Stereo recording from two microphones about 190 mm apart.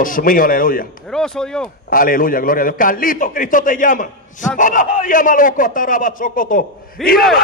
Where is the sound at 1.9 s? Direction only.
45° left (ahead or behind).